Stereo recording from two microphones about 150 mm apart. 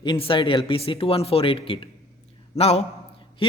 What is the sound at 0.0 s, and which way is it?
A man's voice, 35° left (ahead or behind).